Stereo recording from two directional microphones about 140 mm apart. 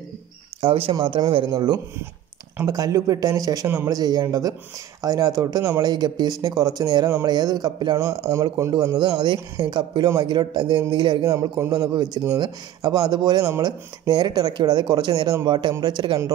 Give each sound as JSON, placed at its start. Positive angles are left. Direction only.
{"t": 0.6, "sound": "speech", "side_deg": -40}
{"t": 11.6, "sound": "speech", "side_deg": -25}